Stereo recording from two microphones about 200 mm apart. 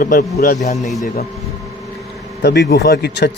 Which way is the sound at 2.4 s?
55° left (ahead or behind).